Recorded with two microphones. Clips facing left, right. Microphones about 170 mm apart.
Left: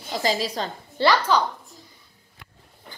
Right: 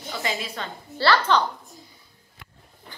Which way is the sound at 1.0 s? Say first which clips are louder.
Left 1 dB; 15° left (ahead or behind).